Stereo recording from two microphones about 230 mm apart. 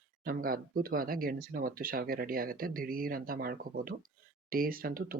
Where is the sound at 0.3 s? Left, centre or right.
Right.